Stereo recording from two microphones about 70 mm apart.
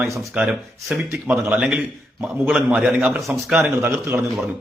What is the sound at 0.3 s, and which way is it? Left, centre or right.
Speech, centre.